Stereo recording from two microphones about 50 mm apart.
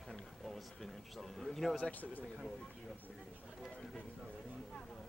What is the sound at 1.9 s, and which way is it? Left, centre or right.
Speech, left.